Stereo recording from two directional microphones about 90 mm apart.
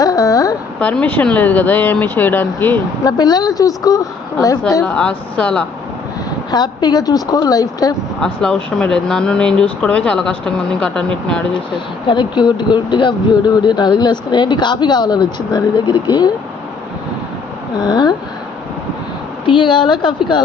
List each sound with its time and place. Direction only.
0.0 s a sound: 40° left (ahead or behind)
0.8 s speech: 15° left (ahead or behind)
3.0 s speech: 45° left (ahead or behind)
4.9 s speech: 10° left (ahead or behind)
6.5 s speech: 50° left (ahead or behind)
8.2 s speech: 5° left (ahead or behind)
11.7 s speech: 60° left (ahead or behind)
17.7 s speech: 50° left (ahead or behind)
19.5 s speech: 65° left (ahead or behind)